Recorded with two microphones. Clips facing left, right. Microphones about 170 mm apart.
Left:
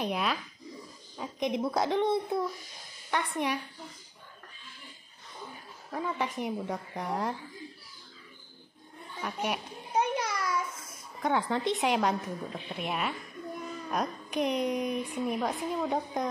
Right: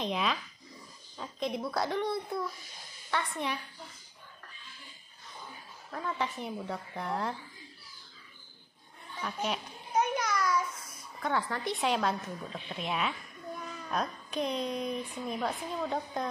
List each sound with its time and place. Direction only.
0.0 s a woman's voice: 10° left (ahead or behind)
5.9 s a woman's voice: 10° left (ahead or behind)
9.2 s a woman's voice: 10° left (ahead or behind)
9.9 s a sound: 30° left (ahead or behind)
11.2 s a woman's voice: 20° left (ahead or behind)